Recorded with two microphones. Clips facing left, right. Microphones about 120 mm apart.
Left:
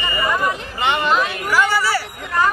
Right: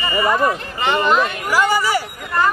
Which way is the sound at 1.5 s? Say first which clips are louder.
Right 1 dB; 15° right (ahead or behind).